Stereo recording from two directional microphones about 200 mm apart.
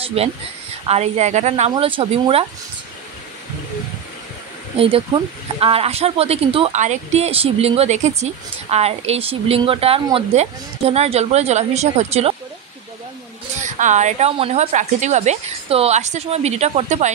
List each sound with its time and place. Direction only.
0.0 s a woman's voice: 30° right (ahead or behind)
4.7 s a woman's voice: 30° right (ahead or behind)
13.6 s a woman's voice: 40° right (ahead or behind)